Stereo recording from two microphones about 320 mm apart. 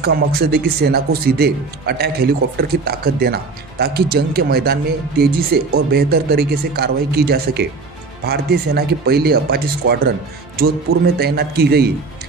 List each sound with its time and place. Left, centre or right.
0.0 s speech: right